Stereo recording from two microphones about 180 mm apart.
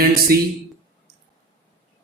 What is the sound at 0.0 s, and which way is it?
Speech, 55° right (ahead or behind).